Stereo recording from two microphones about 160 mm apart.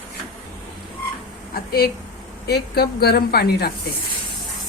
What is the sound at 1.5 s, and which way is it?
A woman's voice, 70° left (ahead or behind).